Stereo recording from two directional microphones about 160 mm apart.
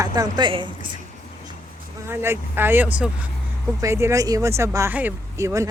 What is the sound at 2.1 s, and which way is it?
Speech, 15° right (ahead or behind).